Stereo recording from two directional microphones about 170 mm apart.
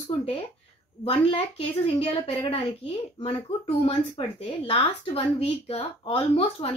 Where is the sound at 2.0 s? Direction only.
35° left (ahead or behind).